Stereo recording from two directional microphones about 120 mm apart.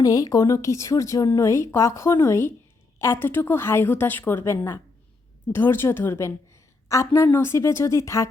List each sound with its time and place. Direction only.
0.0 s a woman's voice: 30° left (ahead or behind)